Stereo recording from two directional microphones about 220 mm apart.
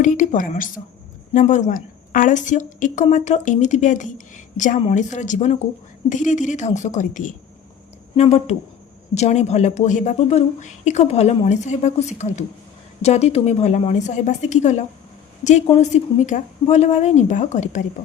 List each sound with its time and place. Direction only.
0.0 s a woman's voice: 35° left (ahead or behind)